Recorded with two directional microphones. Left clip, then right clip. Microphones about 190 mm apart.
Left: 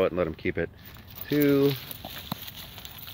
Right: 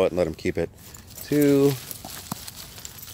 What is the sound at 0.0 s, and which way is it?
Speech, 25° right (ahead or behind).